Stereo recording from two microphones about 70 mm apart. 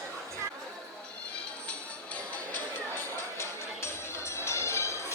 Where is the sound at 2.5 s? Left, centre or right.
Left.